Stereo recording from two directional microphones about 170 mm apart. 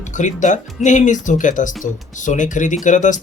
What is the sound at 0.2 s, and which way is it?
Speech, 45° left (ahead or behind).